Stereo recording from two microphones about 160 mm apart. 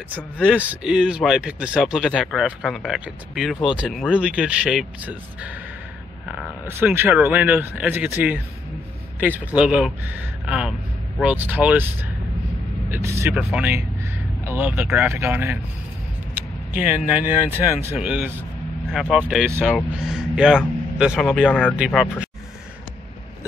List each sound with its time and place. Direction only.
0.1 s speech: 10° right (ahead or behind)
6.7 s speech: 15° right (ahead or behind)
16.7 s speech: 10° right (ahead or behind)
18.9 s speech: 5° left (ahead or behind)
21.5 s speech: 10° left (ahead or behind)
21.7 s speech: 5° right (ahead or behind)